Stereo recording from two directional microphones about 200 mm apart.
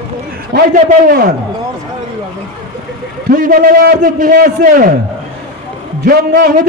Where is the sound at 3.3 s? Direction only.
45° right (ahead or behind).